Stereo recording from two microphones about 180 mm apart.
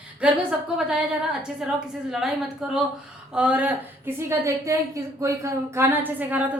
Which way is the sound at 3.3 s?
10° right (ahead or behind).